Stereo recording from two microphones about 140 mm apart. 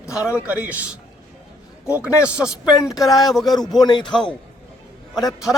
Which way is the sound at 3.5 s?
30° left (ahead or behind).